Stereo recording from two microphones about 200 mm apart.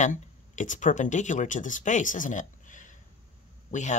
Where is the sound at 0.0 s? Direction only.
40° left (ahead or behind).